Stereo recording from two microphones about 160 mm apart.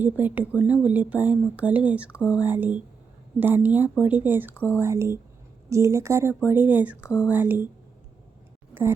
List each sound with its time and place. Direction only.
0.0 s speech: 10° right (ahead or behind)